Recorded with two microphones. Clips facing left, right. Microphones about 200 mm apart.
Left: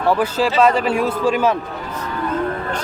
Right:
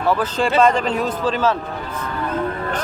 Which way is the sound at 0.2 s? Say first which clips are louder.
Left 1 dB; 5° left (ahead or behind).